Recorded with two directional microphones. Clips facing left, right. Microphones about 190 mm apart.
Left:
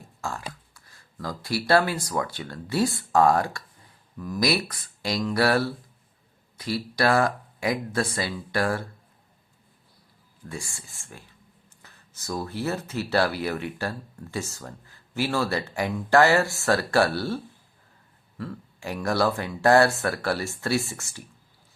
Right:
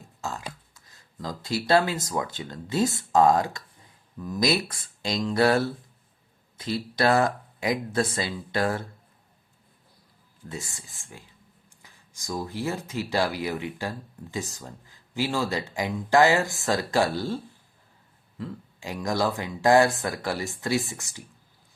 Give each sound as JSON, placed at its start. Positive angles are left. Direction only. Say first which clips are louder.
{"t": 0.2, "sound": "speech", "louder": "left 1 dB", "side_deg": -20}
{"t": 10.5, "sound": "speech", "louder": "even", "side_deg": -20}